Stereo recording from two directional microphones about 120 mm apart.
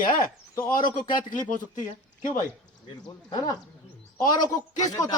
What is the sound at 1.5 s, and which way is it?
Speech, 90° left.